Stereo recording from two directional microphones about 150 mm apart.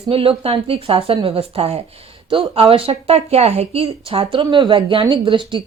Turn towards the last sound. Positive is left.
turn(degrees=-35)  # may be behind; listen again after turning